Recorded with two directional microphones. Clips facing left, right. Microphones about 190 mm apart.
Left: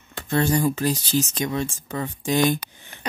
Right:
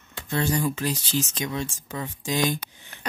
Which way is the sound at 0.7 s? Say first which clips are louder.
Left 4 dB; 40° left (ahead or behind).